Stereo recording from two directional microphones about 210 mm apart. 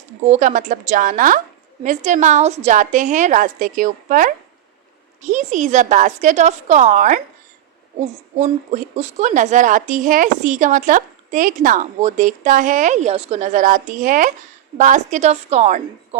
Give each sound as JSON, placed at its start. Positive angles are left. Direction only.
{"t": 0.3, "sound": "speech", "side_deg": -35}
{"t": 8.7, "sound": "speech", "side_deg": -35}